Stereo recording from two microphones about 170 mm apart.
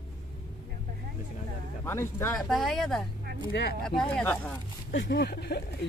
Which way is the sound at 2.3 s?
Centre (ahead or behind).